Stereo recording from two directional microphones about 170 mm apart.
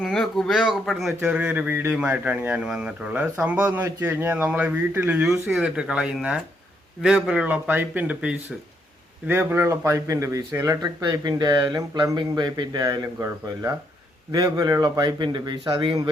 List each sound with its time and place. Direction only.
0.0 s a man's voice: centre (ahead or behind); by 16.0 s 25° right (ahead or behind)